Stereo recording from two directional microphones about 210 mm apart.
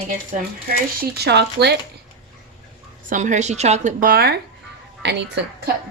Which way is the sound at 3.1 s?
35° right (ahead or behind).